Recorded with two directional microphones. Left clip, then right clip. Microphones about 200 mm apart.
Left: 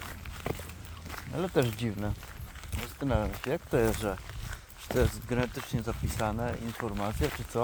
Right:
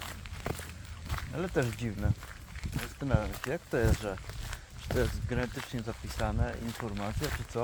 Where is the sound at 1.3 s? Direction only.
35° left (ahead or behind).